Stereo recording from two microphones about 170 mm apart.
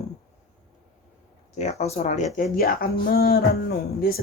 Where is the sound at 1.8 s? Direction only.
40° left (ahead or behind).